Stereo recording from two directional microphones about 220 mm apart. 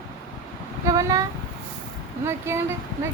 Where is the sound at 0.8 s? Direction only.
15° right (ahead or behind).